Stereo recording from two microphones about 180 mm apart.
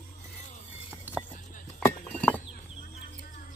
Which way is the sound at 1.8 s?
5° left (ahead or behind).